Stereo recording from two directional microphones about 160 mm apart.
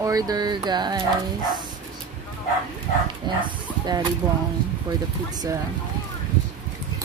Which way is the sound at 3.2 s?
25° right (ahead or behind).